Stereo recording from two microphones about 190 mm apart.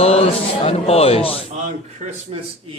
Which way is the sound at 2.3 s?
30° right (ahead or behind).